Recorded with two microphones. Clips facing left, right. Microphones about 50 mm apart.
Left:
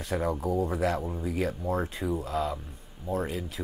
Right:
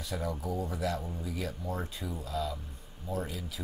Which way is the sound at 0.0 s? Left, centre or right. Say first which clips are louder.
Left 7 dB; left.